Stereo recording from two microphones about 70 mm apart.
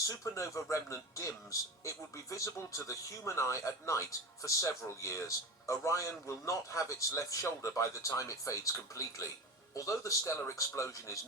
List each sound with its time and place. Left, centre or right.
0.1 s speech: left